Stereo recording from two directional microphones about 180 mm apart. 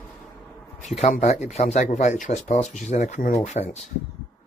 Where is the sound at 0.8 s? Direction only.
40° left (ahead or behind).